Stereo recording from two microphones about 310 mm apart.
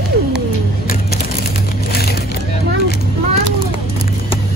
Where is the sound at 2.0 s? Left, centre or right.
Left.